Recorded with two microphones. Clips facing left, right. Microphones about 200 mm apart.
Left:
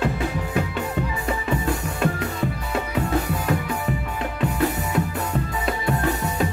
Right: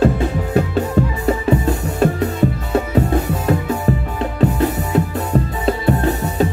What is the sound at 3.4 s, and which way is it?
Music, 35° right (ahead or behind).